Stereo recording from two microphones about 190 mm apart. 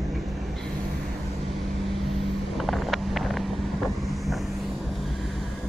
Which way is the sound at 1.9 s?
Centre (ahead or behind).